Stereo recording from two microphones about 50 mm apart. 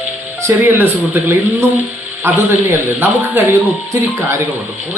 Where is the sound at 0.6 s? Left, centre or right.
Right.